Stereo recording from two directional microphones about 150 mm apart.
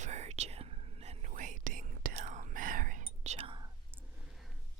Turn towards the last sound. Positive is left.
turn(degrees=-45)  # may be behind; listen again after turning